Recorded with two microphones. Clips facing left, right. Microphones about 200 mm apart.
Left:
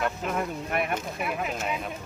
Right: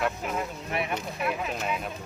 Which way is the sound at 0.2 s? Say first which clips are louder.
Left 2 dB; 10° right (ahead or behind).